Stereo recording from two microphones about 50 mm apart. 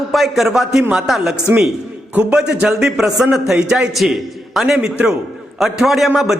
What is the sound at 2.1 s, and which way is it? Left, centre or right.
Speech, right.